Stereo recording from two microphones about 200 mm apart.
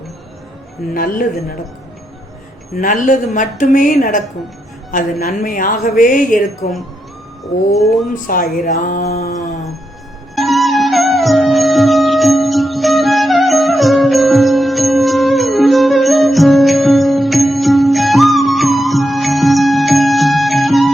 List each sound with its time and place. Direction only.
0.9 s speech: 45° left (ahead or behind)
2.7 s speech: 40° left (ahead or behind)
5.2 s speech: 40° left (ahead or behind)
8.1 s speech: 45° left (ahead or behind)
10.3 s music: centre (ahead or behind)